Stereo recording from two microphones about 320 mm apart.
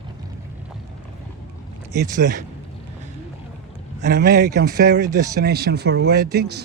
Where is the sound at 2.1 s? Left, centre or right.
Right.